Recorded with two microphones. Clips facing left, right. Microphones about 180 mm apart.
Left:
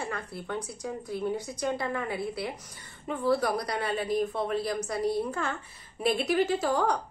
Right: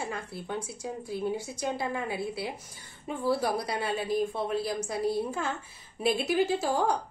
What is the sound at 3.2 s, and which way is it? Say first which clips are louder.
Speech: left 1 dB; 25° right (ahead or behind).